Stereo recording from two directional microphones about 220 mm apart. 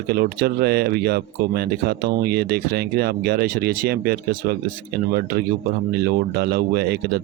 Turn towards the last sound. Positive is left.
turn(degrees=-45)  # may be behind; listen again after turning